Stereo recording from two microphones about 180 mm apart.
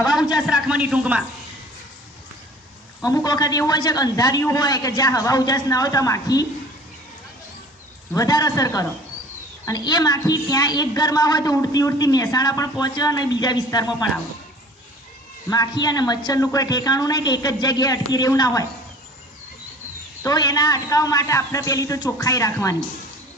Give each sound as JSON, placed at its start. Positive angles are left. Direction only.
{"t": 0.4, "sound": "a man's voice", "side_deg": -5}
{"t": 3.0, "sound": "a man's voice", "side_deg": 20}
{"t": 8.1, "sound": "a man's voice", "side_deg": 20}
{"t": 15.4, "sound": "a man's voice", "side_deg": 20}
{"t": 20.2, "sound": "a man's voice", "side_deg": 20}